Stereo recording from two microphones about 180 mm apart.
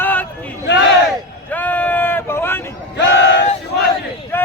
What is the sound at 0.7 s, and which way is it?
Speech, 75° left (ahead or behind).